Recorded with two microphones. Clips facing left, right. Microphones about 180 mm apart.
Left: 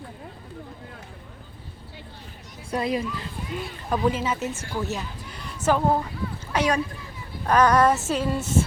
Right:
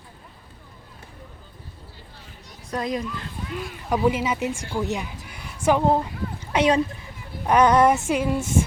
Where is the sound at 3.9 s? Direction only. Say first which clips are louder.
Right 2 dB; 10° right (ahead or behind).